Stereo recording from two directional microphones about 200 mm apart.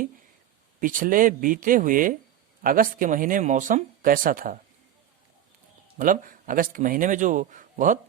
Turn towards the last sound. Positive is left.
turn(degrees=-40)  # may be behind; listen again after turning